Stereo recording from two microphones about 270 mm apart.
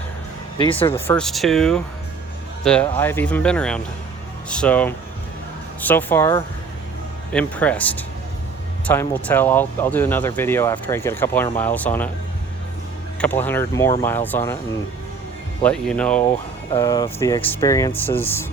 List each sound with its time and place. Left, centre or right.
0.6 s speech: centre
0.9 s speech: centre
13.1 s speech: centre
15.6 s speech: centre